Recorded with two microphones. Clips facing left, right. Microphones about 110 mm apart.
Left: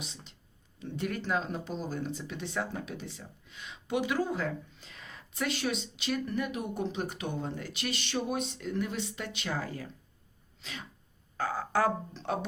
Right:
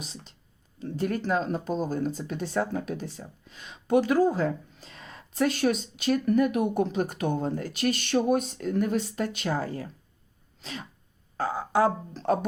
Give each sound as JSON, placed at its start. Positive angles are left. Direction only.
{"t": 0.0, "sound": "a sound", "side_deg": -40}
{"t": 0.8, "sound": "a woman's voice", "side_deg": -35}
{"t": 10.6, "sound": "throat clearing", "side_deg": -35}
{"t": 11.3, "sound": "music", "side_deg": -25}
{"t": 11.6, "sound": "speech", "side_deg": -20}
{"t": 12.1, "sound": "speech", "side_deg": -40}